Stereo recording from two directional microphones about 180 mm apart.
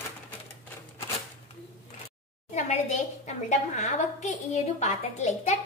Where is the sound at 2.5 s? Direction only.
40° left (ahead or behind).